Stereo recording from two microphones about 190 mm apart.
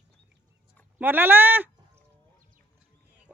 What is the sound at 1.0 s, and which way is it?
Speech, 10° right (ahead or behind).